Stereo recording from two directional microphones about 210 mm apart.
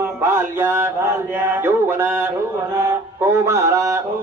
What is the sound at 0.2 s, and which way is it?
Music, 10° right (ahead or behind).